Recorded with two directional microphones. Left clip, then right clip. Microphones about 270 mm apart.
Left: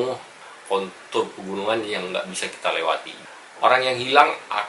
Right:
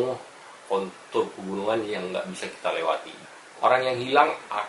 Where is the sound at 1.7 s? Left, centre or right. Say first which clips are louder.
Left 3 dB; centre.